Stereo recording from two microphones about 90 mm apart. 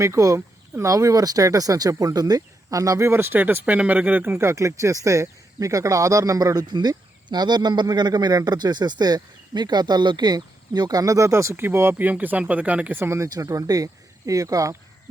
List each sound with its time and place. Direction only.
0.0 s speech: 35° right (ahead or behind)